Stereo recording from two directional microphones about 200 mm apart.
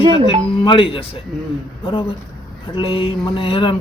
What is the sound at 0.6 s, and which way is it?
Speech, 25° left (ahead or behind).